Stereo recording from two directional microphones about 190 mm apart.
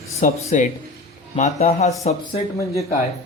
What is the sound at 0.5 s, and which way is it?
A man's voice, 40° left (ahead or behind).